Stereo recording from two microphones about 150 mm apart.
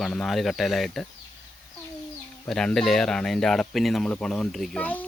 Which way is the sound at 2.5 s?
5° left (ahead or behind).